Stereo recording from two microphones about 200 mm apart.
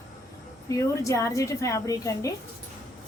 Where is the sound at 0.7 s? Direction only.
15° left (ahead or behind).